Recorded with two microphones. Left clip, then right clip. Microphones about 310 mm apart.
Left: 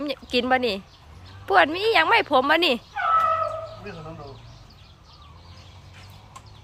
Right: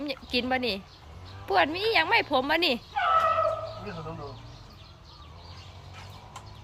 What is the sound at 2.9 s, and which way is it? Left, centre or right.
Fowl, right.